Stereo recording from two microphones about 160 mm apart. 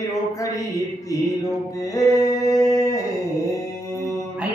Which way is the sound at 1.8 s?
20° left (ahead or behind).